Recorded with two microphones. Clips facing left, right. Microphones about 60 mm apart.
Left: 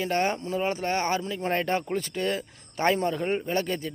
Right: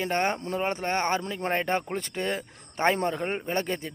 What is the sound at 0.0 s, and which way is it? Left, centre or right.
Speech, right.